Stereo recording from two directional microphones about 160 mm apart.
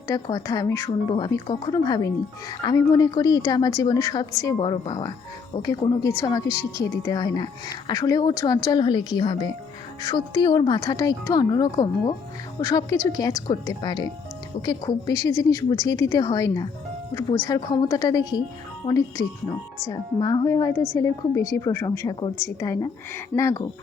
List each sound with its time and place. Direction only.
0.1 s a woman's voice: 25° left (ahead or behind)
17.7 s a woman's voice: 20° left (ahead or behind)